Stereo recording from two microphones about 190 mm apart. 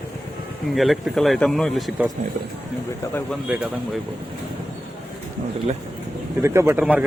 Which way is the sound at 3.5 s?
Centre (ahead or behind).